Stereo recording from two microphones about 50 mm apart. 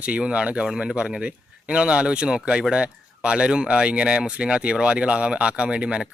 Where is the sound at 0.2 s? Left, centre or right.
Right.